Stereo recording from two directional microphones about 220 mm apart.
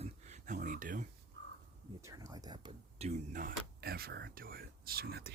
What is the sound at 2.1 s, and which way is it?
Speech, 15° right (ahead or behind).